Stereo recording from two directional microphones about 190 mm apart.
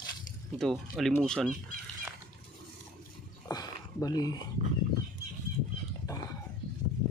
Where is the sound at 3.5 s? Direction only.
20° left (ahead or behind).